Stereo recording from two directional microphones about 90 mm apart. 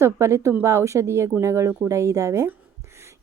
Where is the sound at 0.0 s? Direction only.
30° right (ahead or behind).